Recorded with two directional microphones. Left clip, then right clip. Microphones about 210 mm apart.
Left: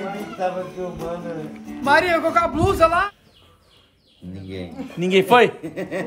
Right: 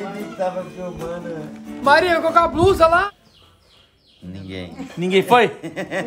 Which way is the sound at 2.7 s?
35° right (ahead or behind).